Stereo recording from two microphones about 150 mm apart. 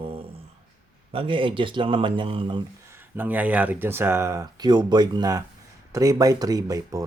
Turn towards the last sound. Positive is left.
turn(degrees=-25)  # may be behind; listen again after turning